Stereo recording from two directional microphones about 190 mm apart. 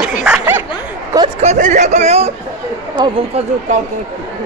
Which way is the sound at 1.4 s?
40° right (ahead or behind).